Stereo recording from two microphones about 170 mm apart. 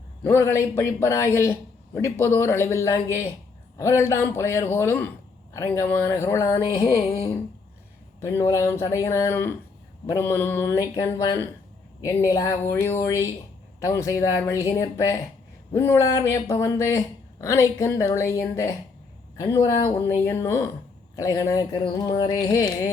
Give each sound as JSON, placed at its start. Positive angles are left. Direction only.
{"t": 0.2, "sound": "a man's voice", "side_deg": 15}
{"t": 8.2, "sound": "a man's voice", "side_deg": 20}